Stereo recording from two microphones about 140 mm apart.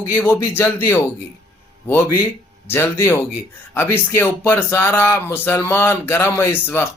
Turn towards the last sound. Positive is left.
turn(degrees=15)  # may be behind; listen again after turning